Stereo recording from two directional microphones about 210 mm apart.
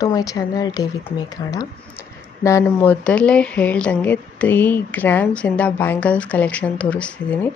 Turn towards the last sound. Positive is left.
turn(degrees=5)  # may be behind; listen again after turning